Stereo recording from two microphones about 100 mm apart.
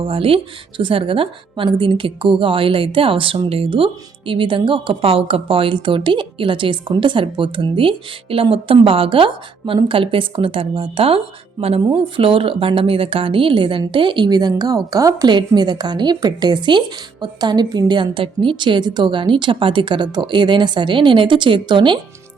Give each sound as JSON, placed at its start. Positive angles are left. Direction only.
{"t": 0.0, "sound": "a woman's voice", "side_deg": -65}